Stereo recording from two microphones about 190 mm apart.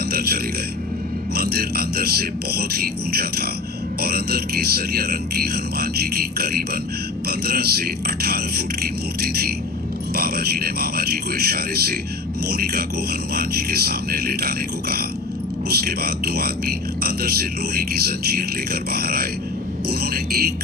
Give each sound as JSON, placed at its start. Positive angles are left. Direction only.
{"t": 0.0, "sound": "music", "side_deg": -55}
{"t": 1.4, "sound": "a man's voice", "side_deg": -55}